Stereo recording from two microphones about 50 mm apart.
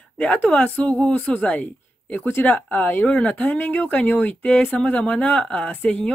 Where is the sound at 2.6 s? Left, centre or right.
Left.